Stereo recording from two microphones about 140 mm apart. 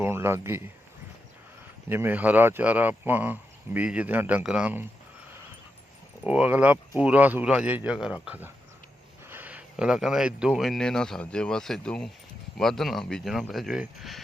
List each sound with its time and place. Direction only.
0.0 s speech: 20° right (ahead or behind)
1.9 s speech: 15° right (ahead or behind)
6.2 s speech: 10° right (ahead or behind)